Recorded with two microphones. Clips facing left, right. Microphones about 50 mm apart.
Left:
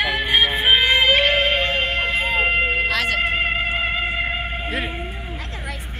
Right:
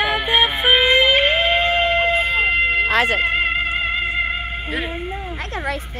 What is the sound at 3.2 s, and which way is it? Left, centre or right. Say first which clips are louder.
Music: right 2 dB; centre.